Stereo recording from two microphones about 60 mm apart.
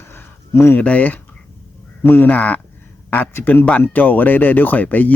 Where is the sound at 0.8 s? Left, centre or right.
Left.